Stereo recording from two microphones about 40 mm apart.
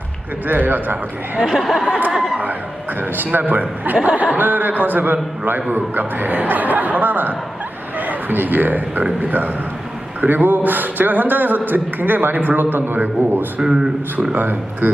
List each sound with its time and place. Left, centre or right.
0.4 s speech: right
1.4 s a man's voice: centre
1.6 s speech: centre
3.3 s a man's voice: right
10.2 s speech: right
13.6 s a man's voice: centre
14.3 s speech: right